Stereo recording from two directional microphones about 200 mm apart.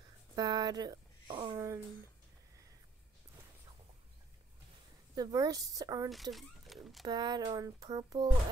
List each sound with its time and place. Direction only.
0.4 s a sound: 20° right (ahead or behind)
5.1 s a woman's voice: 20° right (ahead or behind)
6.3 s speech: centre (ahead or behind)
7.1 s speech: 20° right (ahead or behind)